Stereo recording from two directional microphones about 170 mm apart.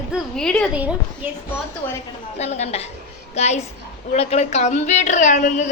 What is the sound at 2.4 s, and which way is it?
A woman's voice, 40° left (ahead or behind).